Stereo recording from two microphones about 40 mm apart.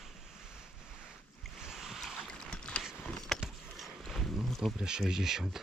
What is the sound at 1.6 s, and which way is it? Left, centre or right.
Boat, centre.